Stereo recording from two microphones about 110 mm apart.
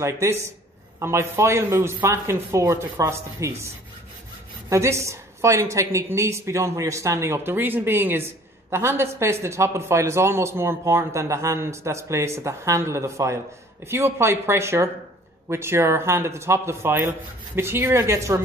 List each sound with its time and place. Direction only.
0.0 s a woman's voice: 25° right (ahead or behind)